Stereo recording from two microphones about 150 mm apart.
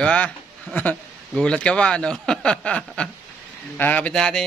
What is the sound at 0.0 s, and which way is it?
A man's voice, 10° left (ahead or behind).